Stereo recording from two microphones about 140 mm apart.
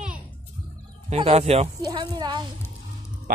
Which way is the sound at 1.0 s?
50° right (ahead or behind).